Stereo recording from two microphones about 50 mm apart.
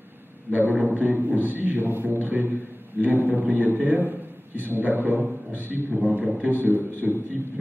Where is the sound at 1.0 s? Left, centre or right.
Right.